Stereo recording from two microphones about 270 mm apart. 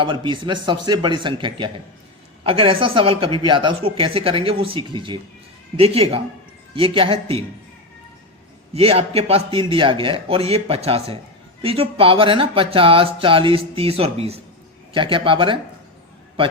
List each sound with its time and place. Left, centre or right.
0.0 s speech: centre
8.7 s speech: right